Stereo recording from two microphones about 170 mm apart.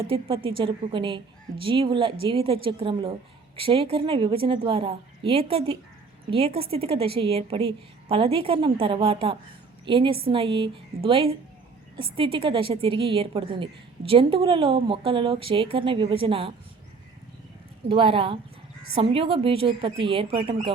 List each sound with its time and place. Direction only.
0.0 s a woman's voice: 30° right (ahead or behind)
17.8 s a woman's voice: 30° right (ahead or behind)